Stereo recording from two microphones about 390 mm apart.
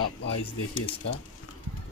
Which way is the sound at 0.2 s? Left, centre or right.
Left.